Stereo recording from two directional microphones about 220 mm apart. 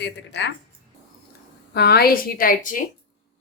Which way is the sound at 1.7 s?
45° left (ahead or behind).